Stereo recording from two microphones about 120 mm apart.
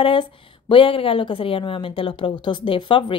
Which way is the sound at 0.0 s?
45° left (ahead or behind).